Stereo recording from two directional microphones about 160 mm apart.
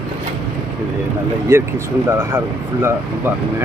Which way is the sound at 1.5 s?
15° right (ahead or behind).